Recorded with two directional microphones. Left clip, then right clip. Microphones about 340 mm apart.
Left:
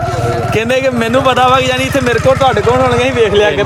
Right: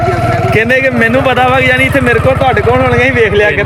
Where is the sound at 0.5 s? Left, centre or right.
Centre.